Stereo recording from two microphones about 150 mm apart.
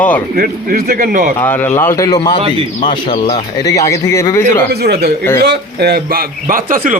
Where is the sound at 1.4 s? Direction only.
15° left (ahead or behind).